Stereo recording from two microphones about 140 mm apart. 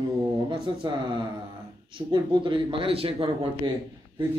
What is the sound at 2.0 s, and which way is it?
Speech, 35° right (ahead or behind).